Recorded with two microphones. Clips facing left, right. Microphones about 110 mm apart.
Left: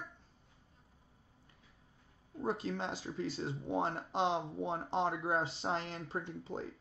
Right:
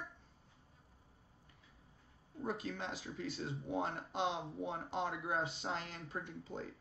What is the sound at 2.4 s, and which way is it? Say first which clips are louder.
Speech: left 4 dB; 30° left (ahead or behind).